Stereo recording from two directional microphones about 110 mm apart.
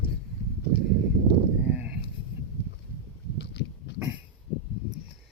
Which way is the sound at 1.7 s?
10° right (ahead or behind).